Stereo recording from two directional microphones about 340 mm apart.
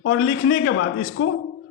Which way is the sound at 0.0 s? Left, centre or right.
Left.